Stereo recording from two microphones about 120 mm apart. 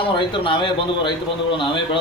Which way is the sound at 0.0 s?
45° left (ahead or behind).